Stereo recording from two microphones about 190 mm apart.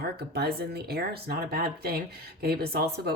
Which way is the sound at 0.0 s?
55° right (ahead or behind).